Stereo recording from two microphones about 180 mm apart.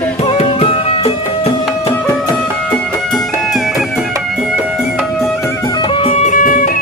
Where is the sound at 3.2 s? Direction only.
Centre (ahead or behind).